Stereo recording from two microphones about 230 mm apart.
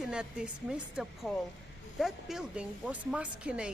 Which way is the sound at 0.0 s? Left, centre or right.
Centre.